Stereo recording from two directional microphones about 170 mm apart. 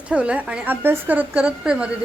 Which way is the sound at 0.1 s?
5° right (ahead or behind).